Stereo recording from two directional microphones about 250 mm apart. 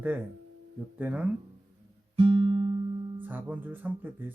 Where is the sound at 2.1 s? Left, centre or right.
Right.